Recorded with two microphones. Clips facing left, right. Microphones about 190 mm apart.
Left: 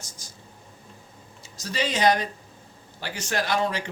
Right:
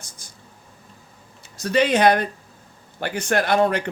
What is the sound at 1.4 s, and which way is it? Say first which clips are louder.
Speech: right 9 dB; 60° right (ahead or behind).